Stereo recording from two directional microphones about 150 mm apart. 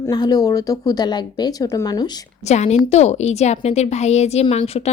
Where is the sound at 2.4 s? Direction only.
50° left (ahead or behind).